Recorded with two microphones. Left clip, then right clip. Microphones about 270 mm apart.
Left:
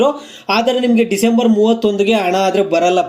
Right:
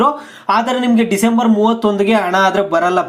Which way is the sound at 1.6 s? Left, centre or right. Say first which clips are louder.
Left 1 dB; right.